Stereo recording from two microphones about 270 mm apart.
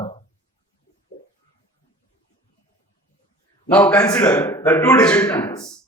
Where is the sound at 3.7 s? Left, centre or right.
Centre.